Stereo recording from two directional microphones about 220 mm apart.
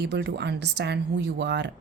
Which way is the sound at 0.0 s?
50° right (ahead or behind).